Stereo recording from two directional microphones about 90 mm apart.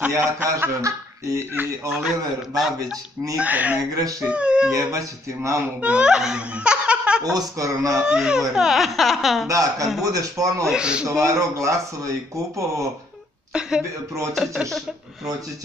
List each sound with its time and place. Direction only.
0.2 s a man's voice: 20° right (ahead or behind)
0.9 s speech: 35° right (ahead or behind)
1.9 s speech: centre (ahead or behind)
3.3 s speech: 15° right (ahead or behind)
4.7 s speech: 35° right (ahead or behind)
5.8 s speech: 15° right (ahead or behind)
7.3 s speech: 40° right (ahead or behind)
8.0 s speech: 10° right (ahead or behind)
9.5 s speech: 40° right (ahead or behind)
10.7 s speech: 10° right (ahead or behind)
11.1 s speech: 35° right (ahead or behind)
13.5 s a woman's voice: 10° right (ahead or behind)